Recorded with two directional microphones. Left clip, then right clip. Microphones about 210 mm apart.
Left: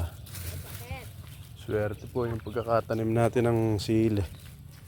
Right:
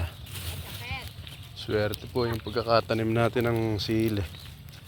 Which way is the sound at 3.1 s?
25° left (ahead or behind).